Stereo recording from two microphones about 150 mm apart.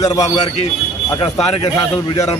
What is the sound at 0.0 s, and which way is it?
Speech, 25° left (ahead or behind).